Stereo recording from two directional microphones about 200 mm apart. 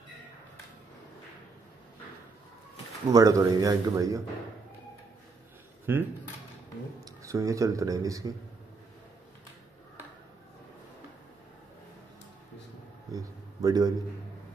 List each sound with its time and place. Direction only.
3.1 s speech: 15° right (ahead or behind)
5.9 s speech: 10° right (ahead or behind)
7.1 s speech: 15° right (ahead or behind)
13.1 s a sound: 15° right (ahead or behind)